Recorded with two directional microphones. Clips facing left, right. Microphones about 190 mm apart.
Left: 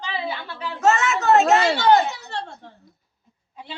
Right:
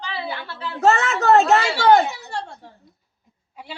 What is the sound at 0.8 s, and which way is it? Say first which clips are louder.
Speech: right 2 dB; 35° right (ahead or behind).